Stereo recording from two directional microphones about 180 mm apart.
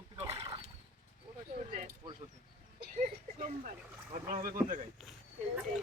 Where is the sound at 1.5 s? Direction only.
35° right (ahead or behind).